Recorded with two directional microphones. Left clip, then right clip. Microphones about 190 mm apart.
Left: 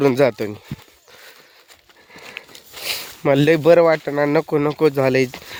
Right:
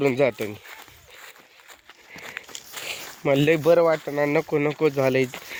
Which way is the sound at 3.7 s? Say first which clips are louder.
Left 6 dB; 60° left (ahead or behind).